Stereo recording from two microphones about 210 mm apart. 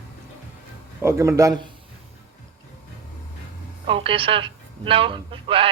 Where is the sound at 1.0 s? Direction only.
15° right (ahead or behind).